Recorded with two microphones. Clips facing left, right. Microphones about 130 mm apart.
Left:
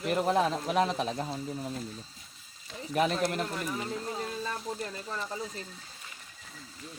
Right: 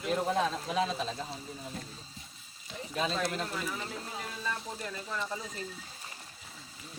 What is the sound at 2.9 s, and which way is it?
Speech, 70° left (ahead or behind).